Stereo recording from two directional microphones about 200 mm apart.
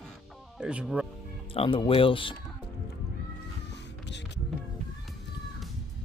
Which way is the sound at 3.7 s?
60° left (ahead or behind).